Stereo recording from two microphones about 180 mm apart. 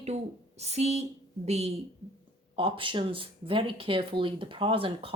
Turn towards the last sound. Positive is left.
turn(degrees=-30)  # may be behind; listen again after turning